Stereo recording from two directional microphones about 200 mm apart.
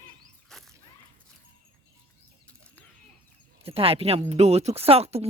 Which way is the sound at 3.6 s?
30° right (ahead or behind).